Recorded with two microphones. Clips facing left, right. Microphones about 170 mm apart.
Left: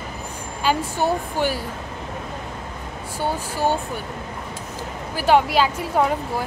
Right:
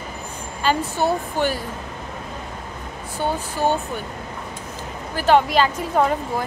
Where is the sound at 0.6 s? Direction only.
10° left (ahead or behind).